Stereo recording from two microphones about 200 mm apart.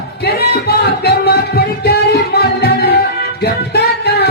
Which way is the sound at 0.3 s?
55° left (ahead or behind).